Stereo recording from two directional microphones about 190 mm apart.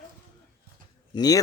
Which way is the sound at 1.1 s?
20° left (ahead or behind).